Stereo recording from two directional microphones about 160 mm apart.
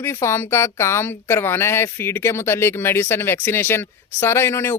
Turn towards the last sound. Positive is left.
turn(degrees=15)  # may be behind; listen again after turning